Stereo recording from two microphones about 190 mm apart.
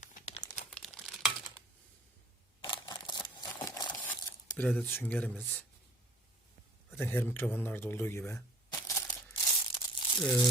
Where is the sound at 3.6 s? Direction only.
20° left (ahead or behind).